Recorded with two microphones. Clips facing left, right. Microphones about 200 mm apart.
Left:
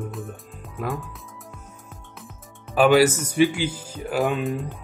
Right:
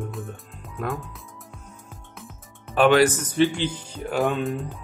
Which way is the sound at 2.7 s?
5° left (ahead or behind).